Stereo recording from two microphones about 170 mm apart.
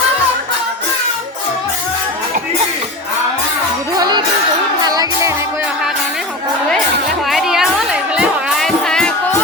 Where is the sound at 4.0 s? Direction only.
25° right (ahead or behind).